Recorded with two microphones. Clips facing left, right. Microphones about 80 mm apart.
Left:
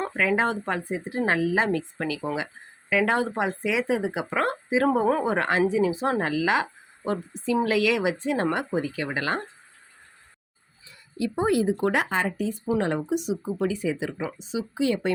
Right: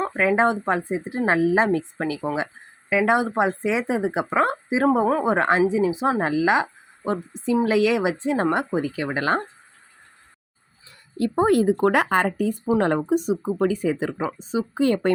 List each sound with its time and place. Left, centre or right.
0.1 s speech: right
2.9 s speech: centre
11.2 s speech: right